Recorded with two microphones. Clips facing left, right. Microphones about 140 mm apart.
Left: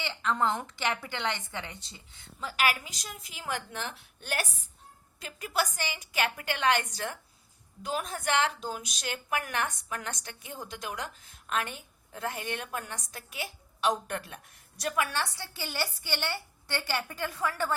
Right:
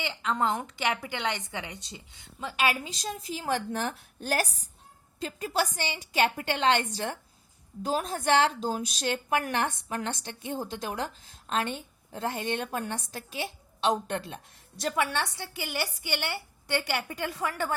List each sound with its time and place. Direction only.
0.0 s a woman's voice: 15° right (ahead or behind)